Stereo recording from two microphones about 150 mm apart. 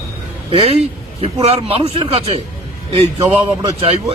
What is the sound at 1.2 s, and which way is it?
A man's voice, 40° right (ahead or behind).